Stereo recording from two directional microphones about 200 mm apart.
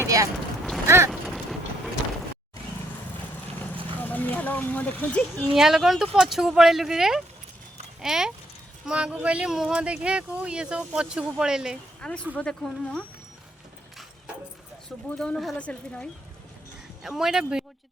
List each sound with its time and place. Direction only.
0.0 s vehicle: 15° right (ahead or behind)
0.9 s boat: 10° right (ahead or behind)
3.6 s vehicle: 10° left (ahead or behind)
5.5 s speech: centre (ahead or behind)
15.2 s speech: centre (ahead or behind)